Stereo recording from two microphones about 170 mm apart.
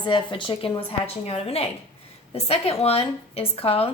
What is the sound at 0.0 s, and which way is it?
A woman's voice, 30° left (ahead or behind).